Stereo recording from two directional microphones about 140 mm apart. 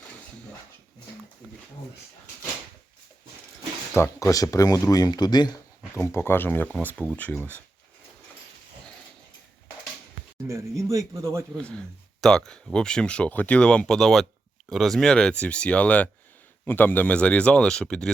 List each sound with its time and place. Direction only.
3.9 s speech: 20° left (ahead or behind)
6.0 s speech: 15° left (ahead or behind)
10.4 s speech: 20° right (ahead or behind)
11.5 s speech: 5° left (ahead or behind)